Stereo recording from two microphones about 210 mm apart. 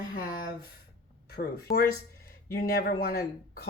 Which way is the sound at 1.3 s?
45° left (ahead or behind).